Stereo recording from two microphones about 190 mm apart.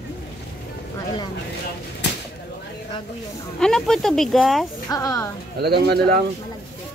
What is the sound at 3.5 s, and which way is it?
Speech, 5° left (ahead or behind).